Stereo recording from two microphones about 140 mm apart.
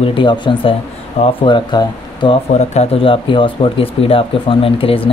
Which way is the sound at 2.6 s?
50° left (ahead or behind).